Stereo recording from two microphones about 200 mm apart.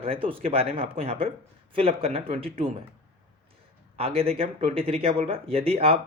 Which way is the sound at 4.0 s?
30° right (ahead or behind).